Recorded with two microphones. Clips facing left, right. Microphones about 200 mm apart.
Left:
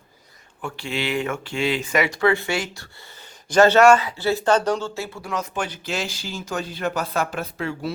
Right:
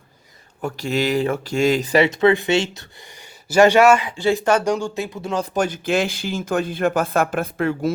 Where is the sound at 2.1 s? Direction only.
20° right (ahead or behind).